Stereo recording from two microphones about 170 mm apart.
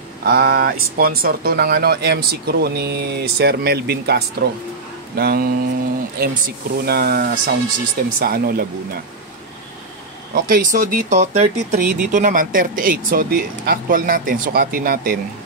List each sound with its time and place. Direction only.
0.2 s speech: 65° right (ahead or behind)
10.3 s speech: 55° right (ahead or behind)